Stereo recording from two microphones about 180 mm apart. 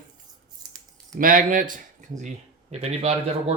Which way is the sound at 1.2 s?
50° right (ahead or behind).